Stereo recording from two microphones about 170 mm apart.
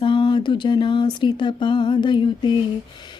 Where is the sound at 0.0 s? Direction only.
30° left (ahead or behind).